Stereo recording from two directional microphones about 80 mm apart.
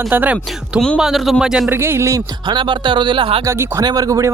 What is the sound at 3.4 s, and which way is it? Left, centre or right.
Speech, right.